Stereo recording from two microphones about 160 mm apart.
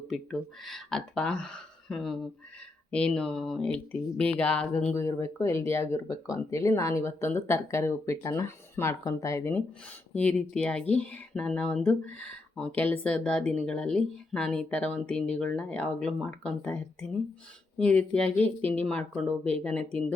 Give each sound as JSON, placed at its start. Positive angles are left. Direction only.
{"t": 0.1, "sound": "speech", "side_deg": 0}
{"t": 10.2, "sound": "speech", "side_deg": 5}